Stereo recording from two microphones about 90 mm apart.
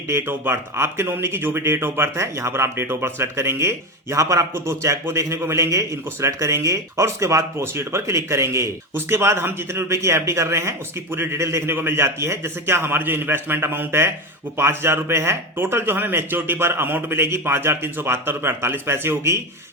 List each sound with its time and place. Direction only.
0.1 s speech: 25° right (ahead or behind)